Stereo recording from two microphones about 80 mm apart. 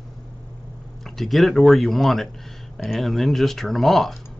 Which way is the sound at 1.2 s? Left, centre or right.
Centre.